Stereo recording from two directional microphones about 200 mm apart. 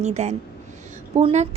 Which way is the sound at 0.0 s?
35° right (ahead or behind).